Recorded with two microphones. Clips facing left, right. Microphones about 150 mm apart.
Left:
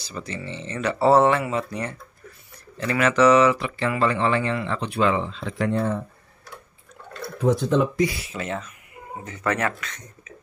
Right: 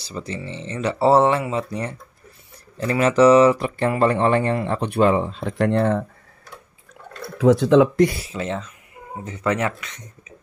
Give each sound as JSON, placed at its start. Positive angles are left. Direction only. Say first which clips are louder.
{"t": 0.0, "sound": "speech", "louder": "right 3 dB", "side_deg": -30}
{"t": 7.3, "sound": "speech", "louder": "right 6 dB", "side_deg": -90}
{"t": 8.4, "sound": "speech", "louder": "right 4 dB", "side_deg": -25}